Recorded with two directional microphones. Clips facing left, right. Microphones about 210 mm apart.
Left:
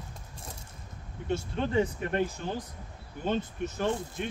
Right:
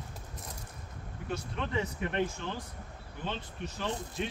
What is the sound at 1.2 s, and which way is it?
Speech, 30° left (ahead or behind).